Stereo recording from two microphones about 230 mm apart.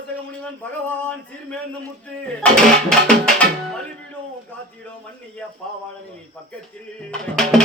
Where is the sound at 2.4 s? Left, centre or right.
Centre.